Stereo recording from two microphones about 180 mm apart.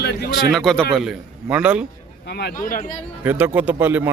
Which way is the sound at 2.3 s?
65° left (ahead or behind).